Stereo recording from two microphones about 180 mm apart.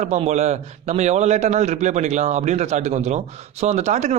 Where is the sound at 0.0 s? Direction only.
40° right (ahead or behind).